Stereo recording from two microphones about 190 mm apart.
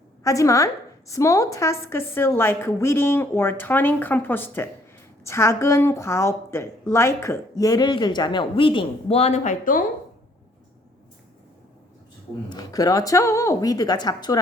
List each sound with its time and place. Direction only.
0.3 s a woman's voice: 15° left (ahead or behind); by 9.8 s 40° left (ahead or behind)
12.5 s speech: 20° left (ahead or behind)